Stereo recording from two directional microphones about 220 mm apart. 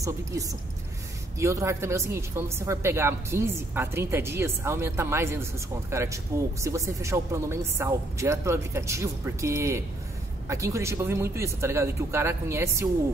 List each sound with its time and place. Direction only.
0.0 s speech: 15° right (ahead or behind)